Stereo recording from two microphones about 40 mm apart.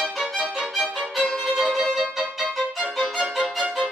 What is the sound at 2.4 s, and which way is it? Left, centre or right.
Violin, right.